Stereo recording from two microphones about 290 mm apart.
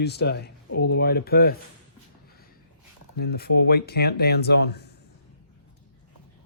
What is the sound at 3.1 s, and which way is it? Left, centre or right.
Speech, left.